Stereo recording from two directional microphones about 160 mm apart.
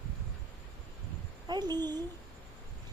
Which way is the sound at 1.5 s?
25° right (ahead or behind).